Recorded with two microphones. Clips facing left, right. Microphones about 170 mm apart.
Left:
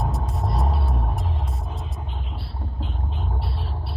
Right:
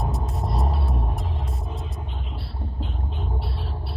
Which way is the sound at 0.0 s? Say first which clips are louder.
Left 1 dB; centre (ahead or behind).